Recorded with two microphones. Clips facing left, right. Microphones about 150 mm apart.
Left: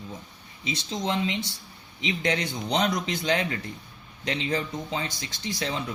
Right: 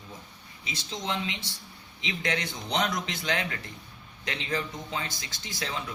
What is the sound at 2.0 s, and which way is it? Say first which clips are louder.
Speech: left 4 dB; 25° left (ahead or behind).